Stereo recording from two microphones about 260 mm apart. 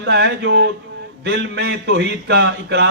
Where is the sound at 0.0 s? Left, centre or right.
Right.